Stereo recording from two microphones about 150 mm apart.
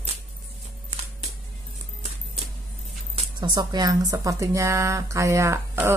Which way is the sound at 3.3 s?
30° right (ahead or behind).